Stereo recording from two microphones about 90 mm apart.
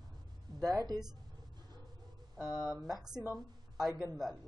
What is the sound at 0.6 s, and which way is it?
Speech, 45° right (ahead or behind).